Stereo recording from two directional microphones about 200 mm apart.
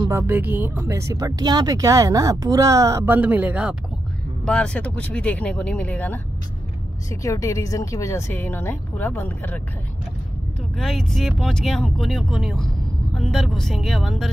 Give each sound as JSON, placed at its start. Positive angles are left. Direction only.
{"t": 0.1, "sound": "speech", "side_deg": -10}
{"t": 4.5, "sound": "speech", "side_deg": 5}
{"t": 10.8, "sound": "speech", "side_deg": 0}